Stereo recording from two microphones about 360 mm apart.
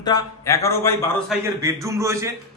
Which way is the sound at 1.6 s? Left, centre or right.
Centre.